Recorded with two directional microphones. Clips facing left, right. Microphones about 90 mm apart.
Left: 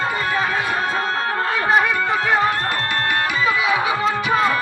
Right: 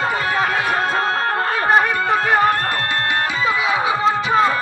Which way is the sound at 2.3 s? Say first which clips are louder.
Right 3 dB; 55° right (ahead or behind).